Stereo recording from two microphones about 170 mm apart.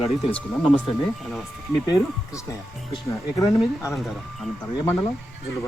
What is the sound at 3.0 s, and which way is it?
Speech, 20° left (ahead or behind).